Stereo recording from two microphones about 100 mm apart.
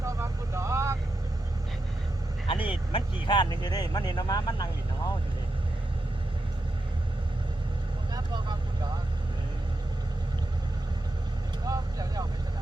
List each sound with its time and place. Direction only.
0.0 s vehicle: 30° right (ahead or behind)
2.5 s speech: 65° left (ahead or behind); by 4.7 s 40° left (ahead or behind)
8.1 s vehicle: 45° right (ahead or behind)
11.6 s vehicle: 35° right (ahead or behind)